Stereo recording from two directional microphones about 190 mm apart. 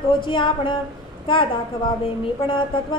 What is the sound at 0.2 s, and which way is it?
A woman's voice, 25° left (ahead or behind).